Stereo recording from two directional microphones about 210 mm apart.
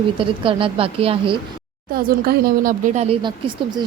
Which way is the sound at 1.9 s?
45° right (ahead or behind).